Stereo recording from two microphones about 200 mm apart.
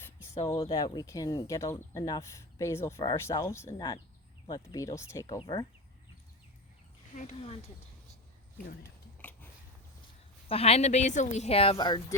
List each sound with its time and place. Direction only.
0.3 s speech: 20° left (ahead or behind)
7.3 s speech: 30° left (ahead or behind)
10.5 s a woman's voice: 30° left (ahead or behind)